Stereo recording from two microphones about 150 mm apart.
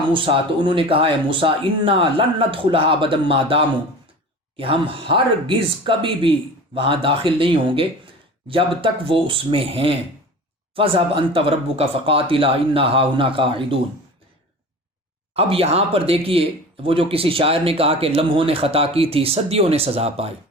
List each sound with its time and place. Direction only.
0.1 s speech: 35° right (ahead or behind)
15.4 s speech: 40° right (ahead or behind)